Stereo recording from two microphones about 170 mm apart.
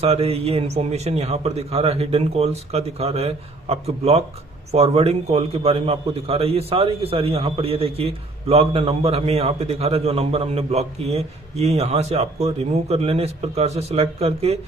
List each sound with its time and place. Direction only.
0.0 s a man's voice: 35° right (ahead or behind)